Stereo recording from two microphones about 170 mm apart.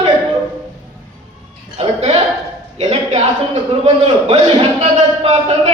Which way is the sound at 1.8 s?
35° right (ahead or behind).